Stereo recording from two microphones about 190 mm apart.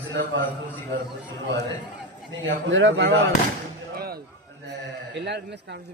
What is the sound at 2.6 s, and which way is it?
Speech, 80° right.